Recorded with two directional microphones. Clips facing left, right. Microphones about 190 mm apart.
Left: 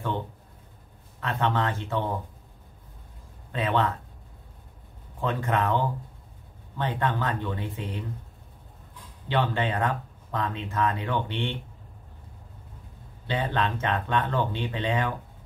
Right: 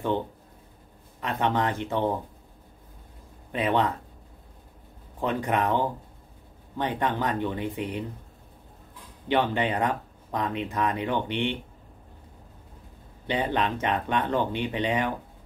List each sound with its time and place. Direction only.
1.2 s speech: 15° right (ahead or behind)
3.5 s speech: 15° right (ahead or behind)
5.2 s speech: 15° right (ahead or behind)
9.3 s speech: 15° right (ahead or behind)
13.3 s speech: 15° right (ahead or behind)